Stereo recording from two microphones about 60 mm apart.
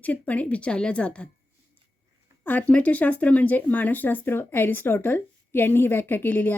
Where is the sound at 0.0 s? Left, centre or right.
Left.